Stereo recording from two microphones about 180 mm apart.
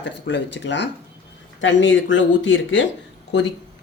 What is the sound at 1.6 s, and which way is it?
Speech, 90° left.